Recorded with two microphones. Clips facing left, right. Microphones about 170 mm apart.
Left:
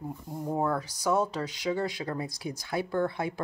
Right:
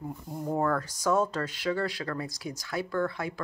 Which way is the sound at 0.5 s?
10° left (ahead or behind).